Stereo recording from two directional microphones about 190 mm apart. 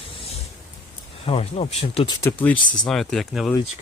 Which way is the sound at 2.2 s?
10° left (ahead or behind).